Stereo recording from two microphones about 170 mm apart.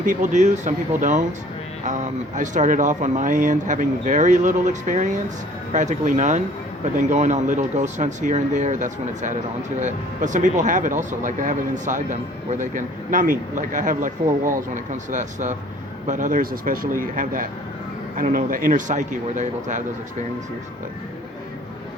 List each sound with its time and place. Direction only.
0.0 s speech: 50° right (ahead or behind)